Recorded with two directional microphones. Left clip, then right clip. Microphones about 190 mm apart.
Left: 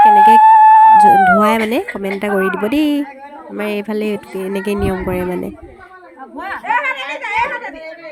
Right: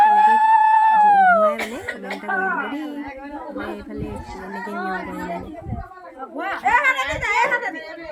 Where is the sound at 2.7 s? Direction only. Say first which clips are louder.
Left 13 dB; 55° left (ahead or behind).